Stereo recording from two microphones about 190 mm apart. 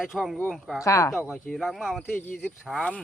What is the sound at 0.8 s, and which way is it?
Speech, 15° left (ahead or behind).